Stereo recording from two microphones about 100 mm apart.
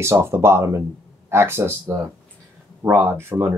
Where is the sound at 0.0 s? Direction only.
25° right (ahead or behind).